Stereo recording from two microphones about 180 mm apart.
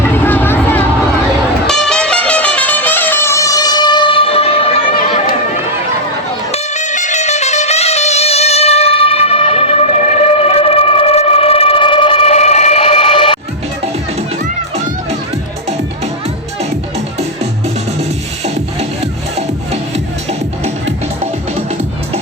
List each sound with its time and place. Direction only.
0.0 s vehicle: 10° left (ahead or behind)
1.6 s music: 5° left (ahead or behind); by 4.9 s 30° left (ahead or behind)
6.5 s music: 40° left (ahead or behind)
18.4 s music: 35° right (ahead or behind)